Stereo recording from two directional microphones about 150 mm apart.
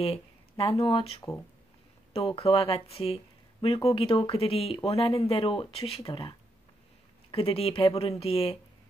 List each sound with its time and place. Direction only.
0.0 s speech: 40° left (ahead or behind)
2.2 s speech: 35° left (ahead or behind)